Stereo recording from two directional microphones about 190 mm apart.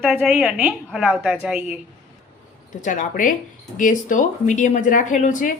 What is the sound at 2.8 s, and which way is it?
Speech, 45° left (ahead or behind).